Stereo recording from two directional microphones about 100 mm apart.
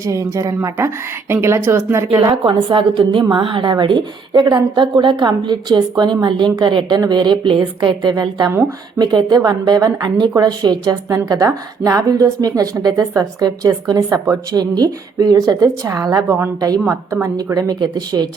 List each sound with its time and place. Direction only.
0.0 s a woman's voice: 35° right (ahead or behind)
2.3 s a woman's voice: 60° right (ahead or behind); by 17.2 s 25° right (ahead or behind)
17.2 s a woman's voice: 40° right (ahead or behind)